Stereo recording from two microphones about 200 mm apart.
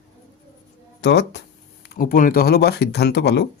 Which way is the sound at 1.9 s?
45° left (ahead or behind).